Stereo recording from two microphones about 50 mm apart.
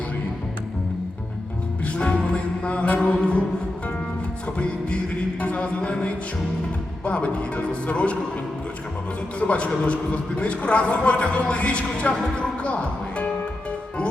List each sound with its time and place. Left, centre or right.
1.8 s music: left
3.2 s a man's voice: left
4.5 s a man's voice: left
5.4 s a sound: left
7.0 s a man's voice: left
9.4 s a man's voice: left
12.6 s speech: left